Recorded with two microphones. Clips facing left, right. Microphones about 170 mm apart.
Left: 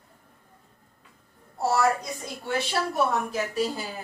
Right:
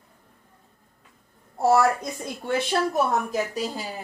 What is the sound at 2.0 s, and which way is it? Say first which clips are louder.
Speech: right 3 dB; 55° right (ahead or behind).